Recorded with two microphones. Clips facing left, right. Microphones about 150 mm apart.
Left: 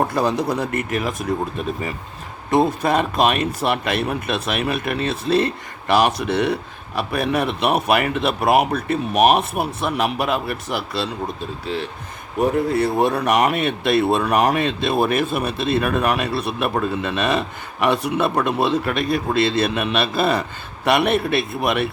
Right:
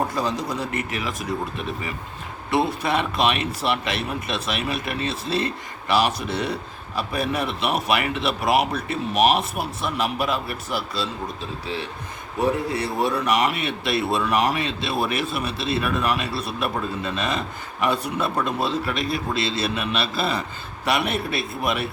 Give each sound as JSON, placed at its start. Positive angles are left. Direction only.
{"t": 0.1, "sound": "speech", "side_deg": 60}
{"t": 2.5, "sound": "speech", "side_deg": 45}
{"t": 12.7, "sound": "speech", "side_deg": 50}